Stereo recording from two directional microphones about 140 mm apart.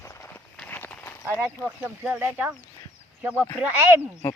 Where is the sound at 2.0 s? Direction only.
15° right (ahead or behind).